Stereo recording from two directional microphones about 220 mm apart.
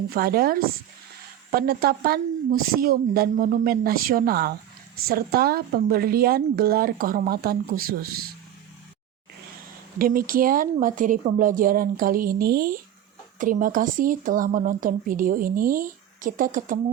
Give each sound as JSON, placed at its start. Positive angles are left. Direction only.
{"t": 0.1, "sound": "a woman's voice", "side_deg": -45}
{"t": 10.0, "sound": "speech", "side_deg": -40}